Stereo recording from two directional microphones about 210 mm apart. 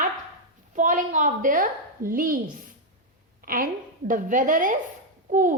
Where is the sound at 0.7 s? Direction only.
40° right (ahead or behind).